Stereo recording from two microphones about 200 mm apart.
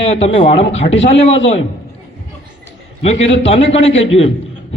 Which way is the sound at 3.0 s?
30° left (ahead or behind).